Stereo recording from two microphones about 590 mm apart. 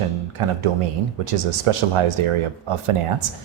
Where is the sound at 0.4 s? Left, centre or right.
Right.